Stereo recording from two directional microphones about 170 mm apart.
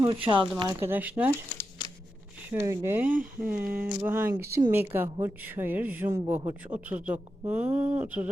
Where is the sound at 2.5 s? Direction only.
15° right (ahead or behind).